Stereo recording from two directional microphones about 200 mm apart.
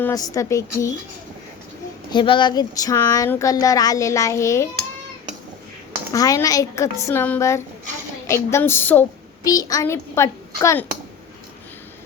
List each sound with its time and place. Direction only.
0.0 s speech: 15° left (ahead or behind)
2.0 s speech: 25° left (ahead or behind)
6.1 s speech: 15° left (ahead or behind)